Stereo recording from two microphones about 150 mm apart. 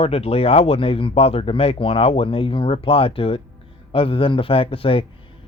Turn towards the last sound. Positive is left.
turn(degrees=35)  # may be behind; listen again after turning